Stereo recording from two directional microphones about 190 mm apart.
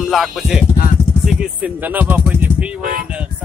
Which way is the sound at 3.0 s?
5° right (ahead or behind).